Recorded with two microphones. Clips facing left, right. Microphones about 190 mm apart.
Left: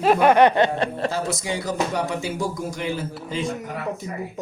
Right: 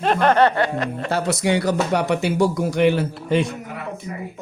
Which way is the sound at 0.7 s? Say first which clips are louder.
Left 1 dB; 30° left (ahead or behind).